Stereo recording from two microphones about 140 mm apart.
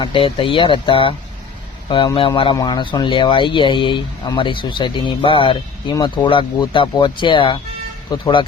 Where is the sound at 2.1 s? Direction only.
40° left (ahead or behind).